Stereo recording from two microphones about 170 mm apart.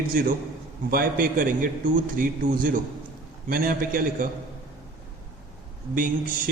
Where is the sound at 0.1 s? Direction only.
55° right (ahead or behind).